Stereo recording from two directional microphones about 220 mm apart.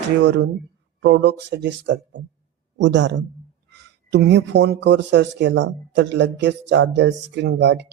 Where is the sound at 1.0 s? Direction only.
50° right (ahead or behind).